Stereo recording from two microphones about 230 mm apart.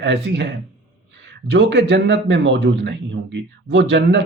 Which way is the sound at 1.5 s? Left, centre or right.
Right.